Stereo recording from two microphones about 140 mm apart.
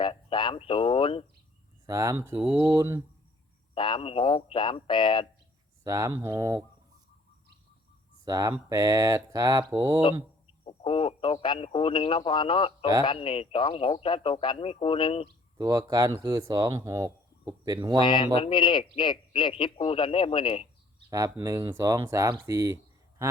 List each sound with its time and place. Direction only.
0.0 s speech: 35° left (ahead or behind)
1.9 s speech: 20° right (ahead or behind)
3.8 s a man's voice: 35° left (ahead or behind)
5.8 s speech: 25° right (ahead or behind)
8.2 s speech: 25° right (ahead or behind)
10.7 s a man's voice: 40° left (ahead or behind)
15.5 s speech: 25° right (ahead or behind)
18.0 s a man's voice: 35° left (ahead or behind)
21.1 s speech: 25° right (ahead or behind)